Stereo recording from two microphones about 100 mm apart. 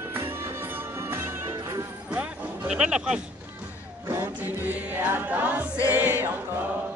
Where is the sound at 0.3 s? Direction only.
25° right (ahead or behind).